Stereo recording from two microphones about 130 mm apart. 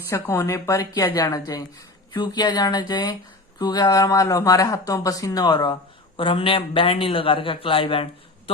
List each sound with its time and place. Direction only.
0.1 s a man's voice: 25° left (ahead or behind); by 8.0 s 45° left (ahead or behind)